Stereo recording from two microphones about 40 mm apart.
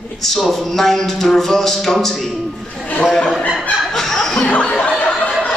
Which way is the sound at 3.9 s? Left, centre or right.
Centre.